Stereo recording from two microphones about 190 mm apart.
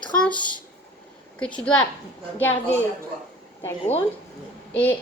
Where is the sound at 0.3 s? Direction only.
25° left (ahead or behind).